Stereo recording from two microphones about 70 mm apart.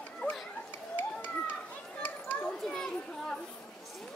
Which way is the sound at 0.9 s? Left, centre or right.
Left.